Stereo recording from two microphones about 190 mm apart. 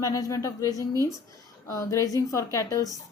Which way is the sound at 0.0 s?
20° left (ahead or behind).